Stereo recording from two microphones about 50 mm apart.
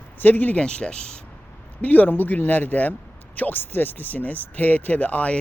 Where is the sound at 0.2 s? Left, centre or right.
Left.